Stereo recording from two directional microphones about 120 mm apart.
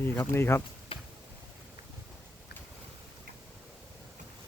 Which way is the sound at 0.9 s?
50° left (ahead or behind).